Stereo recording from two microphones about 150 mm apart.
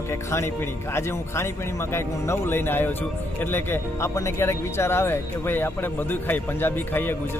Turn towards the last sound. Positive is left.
turn(degrees=15)  # may be behind; listen again after turning